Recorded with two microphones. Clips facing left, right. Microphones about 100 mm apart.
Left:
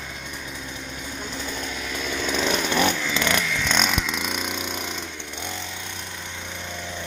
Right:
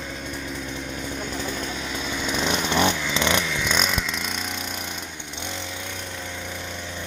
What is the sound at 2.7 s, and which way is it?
Chainsaw, 20° right (ahead or behind).